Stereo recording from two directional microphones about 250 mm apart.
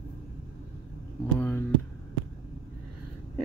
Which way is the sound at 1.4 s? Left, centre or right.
Centre.